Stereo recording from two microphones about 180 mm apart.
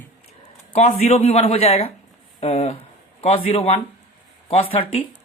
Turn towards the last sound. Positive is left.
turn(degrees=30)  # may be behind; listen again after turning